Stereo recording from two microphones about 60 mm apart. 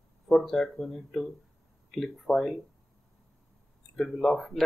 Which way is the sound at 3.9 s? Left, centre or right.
Centre.